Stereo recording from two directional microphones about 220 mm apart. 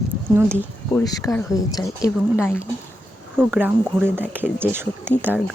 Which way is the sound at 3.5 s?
10° right (ahead or behind).